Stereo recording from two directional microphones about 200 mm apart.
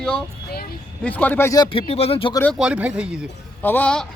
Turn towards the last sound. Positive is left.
turn(degrees=5)  # may be behind; listen again after turning